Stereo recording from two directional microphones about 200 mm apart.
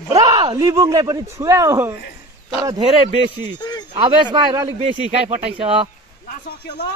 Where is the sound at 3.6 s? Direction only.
20° left (ahead or behind).